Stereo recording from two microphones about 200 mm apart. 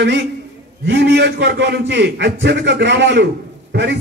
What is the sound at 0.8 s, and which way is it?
A man's voice, 60° right (ahead or behind).